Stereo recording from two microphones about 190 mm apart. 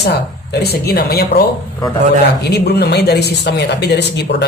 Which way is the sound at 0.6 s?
55° left (ahead or behind).